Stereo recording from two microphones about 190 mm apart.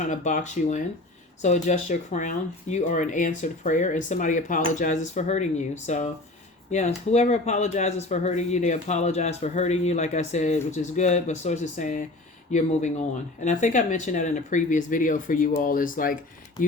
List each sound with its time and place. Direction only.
0.0 s speech: 40° left (ahead or behind)